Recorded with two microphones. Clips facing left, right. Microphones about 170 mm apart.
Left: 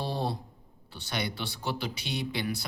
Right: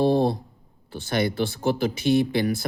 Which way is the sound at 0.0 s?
45° right (ahead or behind).